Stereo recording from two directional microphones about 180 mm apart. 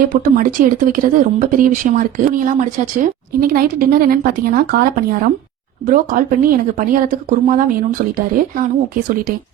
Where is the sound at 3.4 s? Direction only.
55° right (ahead or behind).